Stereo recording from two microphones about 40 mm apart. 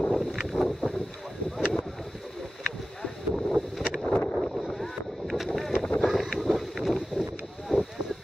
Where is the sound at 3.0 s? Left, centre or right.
Centre.